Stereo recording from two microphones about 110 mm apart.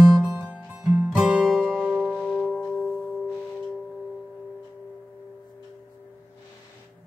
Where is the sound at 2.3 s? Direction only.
Centre (ahead or behind).